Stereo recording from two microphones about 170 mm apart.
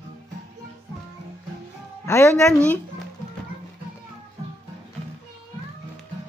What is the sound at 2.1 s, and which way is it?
Speech, 15° left (ahead or behind).